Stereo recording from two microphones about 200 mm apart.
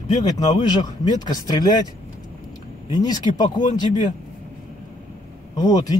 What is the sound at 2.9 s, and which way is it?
Speech, 20° left (ahead or behind).